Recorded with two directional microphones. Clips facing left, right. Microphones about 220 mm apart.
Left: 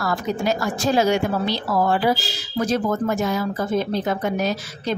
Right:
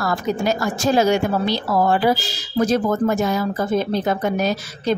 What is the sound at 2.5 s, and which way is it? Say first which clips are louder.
A woman's voice: right 3 dB; 40° right (ahead or behind).